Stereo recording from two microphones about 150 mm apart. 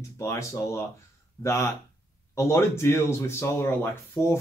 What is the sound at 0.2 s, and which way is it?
Speech, 20° left (ahead or behind).